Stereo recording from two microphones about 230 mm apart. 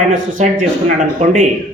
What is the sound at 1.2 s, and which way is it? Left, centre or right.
Speech, right.